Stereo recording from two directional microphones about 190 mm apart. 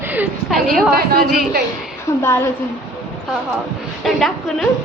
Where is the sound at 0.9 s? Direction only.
50° right (ahead or behind).